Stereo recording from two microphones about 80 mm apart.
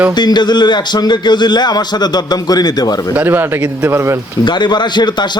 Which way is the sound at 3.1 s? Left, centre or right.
Right.